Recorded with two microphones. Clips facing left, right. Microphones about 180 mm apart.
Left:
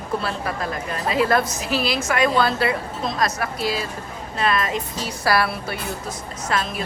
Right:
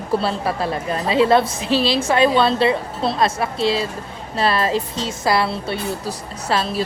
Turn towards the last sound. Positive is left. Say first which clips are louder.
# right 4 dB
turn(degrees=-30)  # may be behind; listen again after turning